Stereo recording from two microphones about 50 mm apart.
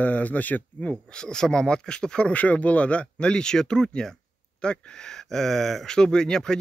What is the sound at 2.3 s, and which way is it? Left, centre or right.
Speech, left.